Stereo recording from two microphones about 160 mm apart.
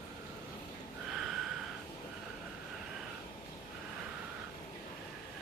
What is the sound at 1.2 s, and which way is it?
Snort, centre (ahead or behind).